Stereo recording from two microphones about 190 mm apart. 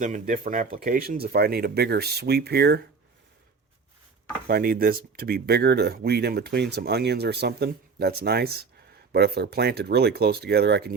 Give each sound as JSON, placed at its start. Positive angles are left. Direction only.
{"t": 0.0, "sound": "speech", "side_deg": -45}
{"t": 4.4, "sound": "speech", "side_deg": -50}